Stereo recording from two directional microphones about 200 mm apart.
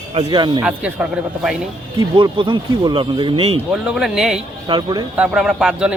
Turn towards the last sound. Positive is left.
turn(degrees=-5)  # may be behind; listen again after turning